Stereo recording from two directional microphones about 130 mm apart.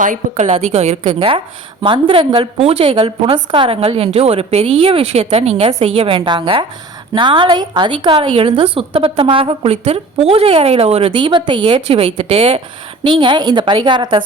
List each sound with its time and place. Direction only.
0.0 s a woman's voice: 70° right (ahead or behind); by 14.2 s 35° right (ahead or behind)